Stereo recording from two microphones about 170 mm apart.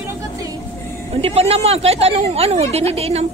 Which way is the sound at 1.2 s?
35° right (ahead or behind).